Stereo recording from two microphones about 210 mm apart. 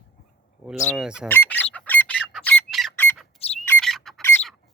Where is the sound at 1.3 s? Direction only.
10° left (ahead or behind).